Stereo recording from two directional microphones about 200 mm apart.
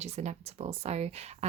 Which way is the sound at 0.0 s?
35° right (ahead or behind).